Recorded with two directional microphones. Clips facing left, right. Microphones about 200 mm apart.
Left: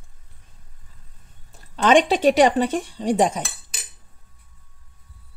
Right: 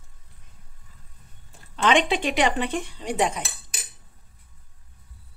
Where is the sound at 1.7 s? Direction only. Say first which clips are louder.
Left 5 dB; 40° left (ahead or behind).